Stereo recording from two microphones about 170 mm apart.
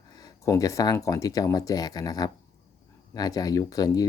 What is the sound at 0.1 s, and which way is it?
Speech, 20° left (ahead or behind).